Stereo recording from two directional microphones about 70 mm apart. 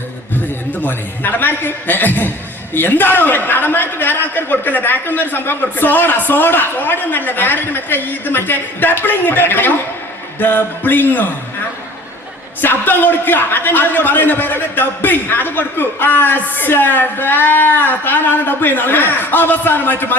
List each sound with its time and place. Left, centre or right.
0.8 s a man's voice: left
12.6 s a man's voice: left